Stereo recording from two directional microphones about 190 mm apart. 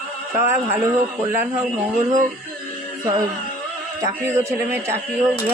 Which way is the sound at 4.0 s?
15° right (ahead or behind).